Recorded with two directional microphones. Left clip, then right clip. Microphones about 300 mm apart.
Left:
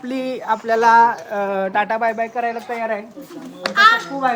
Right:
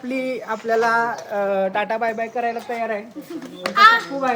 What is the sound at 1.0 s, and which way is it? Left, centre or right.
Speech, left.